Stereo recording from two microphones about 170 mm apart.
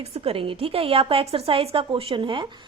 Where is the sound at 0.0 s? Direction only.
35° right (ahead or behind).